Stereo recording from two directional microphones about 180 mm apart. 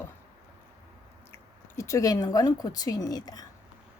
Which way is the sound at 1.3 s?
15° left (ahead or behind).